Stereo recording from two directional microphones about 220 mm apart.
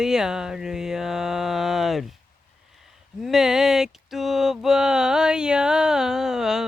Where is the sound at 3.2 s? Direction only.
Centre (ahead or behind).